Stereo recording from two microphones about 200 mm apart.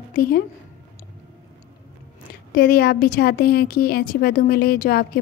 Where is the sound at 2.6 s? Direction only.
50° left (ahead or behind).